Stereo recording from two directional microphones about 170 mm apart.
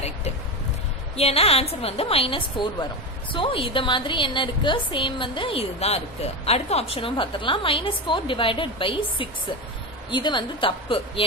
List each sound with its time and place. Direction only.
1.1 s a woman's voice: 35° left (ahead or behind)